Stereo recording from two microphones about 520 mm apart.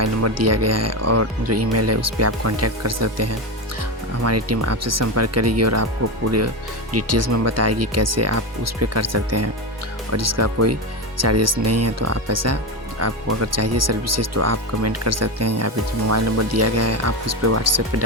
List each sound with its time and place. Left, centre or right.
0.0 s speech: right
6.9 s speech: right